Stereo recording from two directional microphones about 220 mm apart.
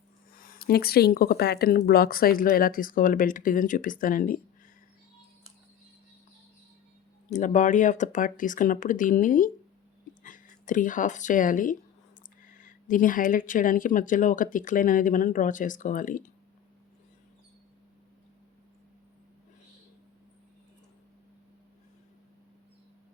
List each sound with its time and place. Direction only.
0.3 s speech: 40° left (ahead or behind)
7.3 s speech: 35° left (ahead or behind)